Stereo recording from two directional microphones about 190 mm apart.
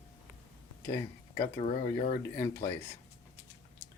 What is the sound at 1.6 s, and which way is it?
Speech, 35° left (ahead or behind).